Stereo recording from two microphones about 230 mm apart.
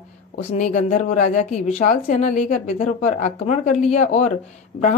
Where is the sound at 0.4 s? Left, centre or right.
Left.